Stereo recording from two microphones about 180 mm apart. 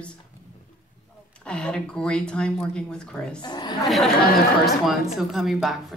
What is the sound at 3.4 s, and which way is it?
Speech, 25° left (ahead or behind).